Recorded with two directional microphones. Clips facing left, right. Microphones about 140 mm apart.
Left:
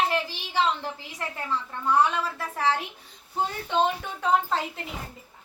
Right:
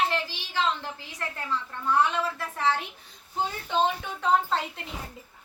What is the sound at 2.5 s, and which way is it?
A woman's voice, 10° left (ahead or behind).